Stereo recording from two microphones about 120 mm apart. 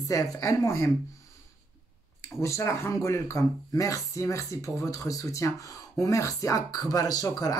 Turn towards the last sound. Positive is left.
turn(degrees=35)  # may be behind; listen again after turning